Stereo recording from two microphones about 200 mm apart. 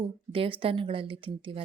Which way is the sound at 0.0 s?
25° right (ahead or behind).